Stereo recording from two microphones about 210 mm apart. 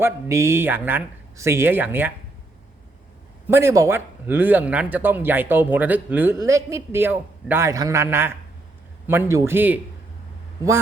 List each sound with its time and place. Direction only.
0.0 s speech: 10° right (ahead or behind)
3.4 s speech: 10° right (ahead or behind)